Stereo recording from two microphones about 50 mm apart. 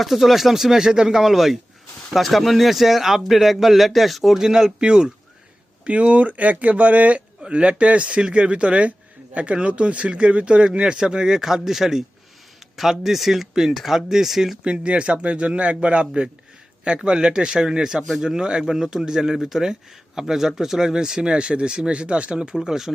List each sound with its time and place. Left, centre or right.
0.0 s speech: centre
4.4 s speech: centre
14.6 s speech: right